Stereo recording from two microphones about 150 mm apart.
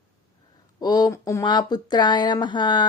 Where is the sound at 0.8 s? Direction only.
25° left (ahead or behind).